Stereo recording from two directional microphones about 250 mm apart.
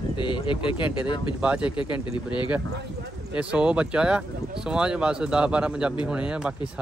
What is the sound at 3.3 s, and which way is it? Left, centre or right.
Speech, centre.